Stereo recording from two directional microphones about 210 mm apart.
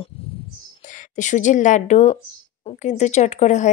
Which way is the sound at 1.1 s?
35° left (ahead or behind).